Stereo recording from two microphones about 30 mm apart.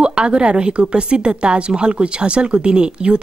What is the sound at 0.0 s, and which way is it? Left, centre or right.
Speech, right.